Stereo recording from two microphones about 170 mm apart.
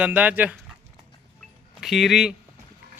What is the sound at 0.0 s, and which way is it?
Speech, 10° right (ahead or behind).